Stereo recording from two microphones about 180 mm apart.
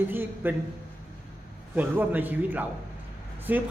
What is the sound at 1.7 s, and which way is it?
Speech, 10° right (ahead or behind).